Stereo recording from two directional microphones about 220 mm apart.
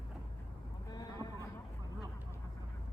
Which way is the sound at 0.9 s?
15° left (ahead or behind).